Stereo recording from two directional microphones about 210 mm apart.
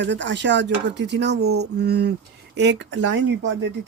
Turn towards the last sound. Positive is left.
turn(degrees=-55)  # may be behind; listen again after turning